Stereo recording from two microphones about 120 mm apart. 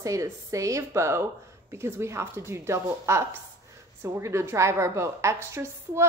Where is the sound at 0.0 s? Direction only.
25° right (ahead or behind).